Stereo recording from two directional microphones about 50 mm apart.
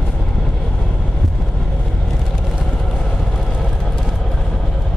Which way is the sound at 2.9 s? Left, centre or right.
Centre.